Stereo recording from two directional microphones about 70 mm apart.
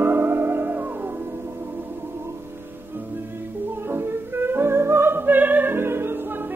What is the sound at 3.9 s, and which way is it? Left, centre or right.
Music, right.